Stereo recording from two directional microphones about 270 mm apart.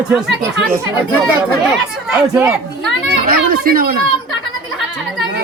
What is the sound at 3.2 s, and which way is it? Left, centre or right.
Speech, right.